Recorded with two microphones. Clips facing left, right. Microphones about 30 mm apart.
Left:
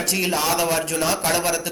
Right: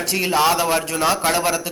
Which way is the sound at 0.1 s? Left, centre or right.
Centre.